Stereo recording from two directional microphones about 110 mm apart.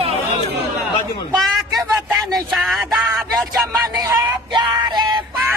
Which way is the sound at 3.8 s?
30° right (ahead or behind).